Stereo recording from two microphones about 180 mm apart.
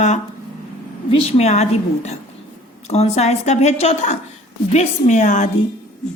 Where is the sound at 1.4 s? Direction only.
40° left (ahead or behind).